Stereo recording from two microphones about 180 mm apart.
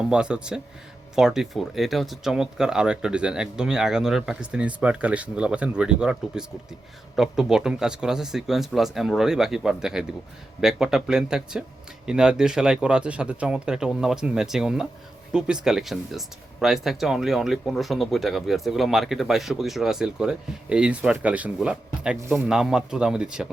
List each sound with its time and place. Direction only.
0.1 s speech: 5° right (ahead or behind)
22.2 s speech: 15° right (ahead or behind)
22.4 s speech: 5° right (ahead or behind)